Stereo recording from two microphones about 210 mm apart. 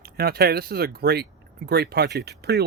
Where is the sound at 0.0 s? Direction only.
50° right (ahead or behind).